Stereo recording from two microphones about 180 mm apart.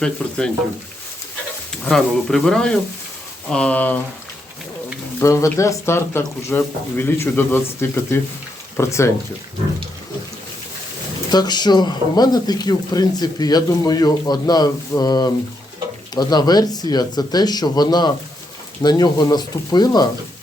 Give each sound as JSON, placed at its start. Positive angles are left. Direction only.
{"t": 0.0, "sound": "speech", "side_deg": 5}
{"t": 1.8, "sound": "speech", "side_deg": 5}
{"t": 5.2, "sound": "speech", "side_deg": 15}
{"t": 11.3, "sound": "speech", "side_deg": 25}